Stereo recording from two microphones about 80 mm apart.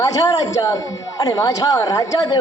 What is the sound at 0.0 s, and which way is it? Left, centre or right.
Speech, left.